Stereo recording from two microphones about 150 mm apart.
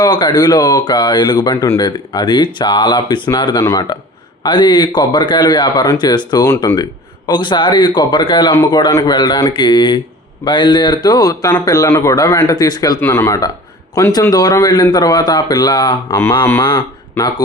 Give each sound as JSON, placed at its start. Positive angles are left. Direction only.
{"t": 0.0, "sound": "speech", "side_deg": 30}